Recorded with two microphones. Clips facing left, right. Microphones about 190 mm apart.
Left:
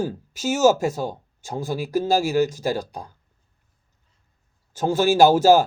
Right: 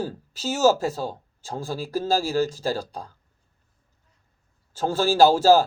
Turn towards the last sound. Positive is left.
turn(degrees=20)  # may be behind; listen again after turning